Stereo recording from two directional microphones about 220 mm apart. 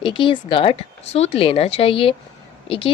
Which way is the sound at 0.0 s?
20° left (ahead or behind).